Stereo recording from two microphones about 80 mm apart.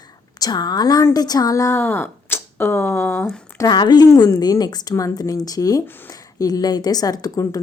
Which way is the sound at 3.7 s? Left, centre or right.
Left.